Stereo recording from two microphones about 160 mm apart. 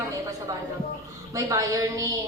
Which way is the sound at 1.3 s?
20° right (ahead or behind).